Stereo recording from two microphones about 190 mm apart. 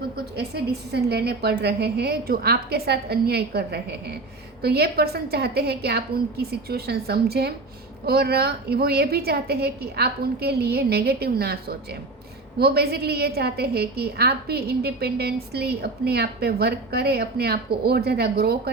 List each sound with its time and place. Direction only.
0.3 s a woman's voice: 60° right (ahead or behind)